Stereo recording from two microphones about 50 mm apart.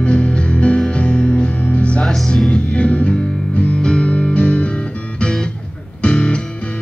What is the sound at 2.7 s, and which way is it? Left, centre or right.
Music, left.